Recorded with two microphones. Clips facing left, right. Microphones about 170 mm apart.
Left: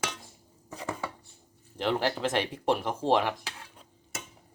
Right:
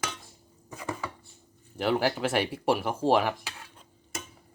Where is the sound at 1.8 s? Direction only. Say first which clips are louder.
Right 2 dB; 10° right (ahead or behind).